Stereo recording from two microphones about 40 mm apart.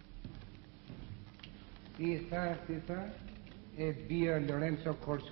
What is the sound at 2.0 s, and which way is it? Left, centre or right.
A man's voice, centre.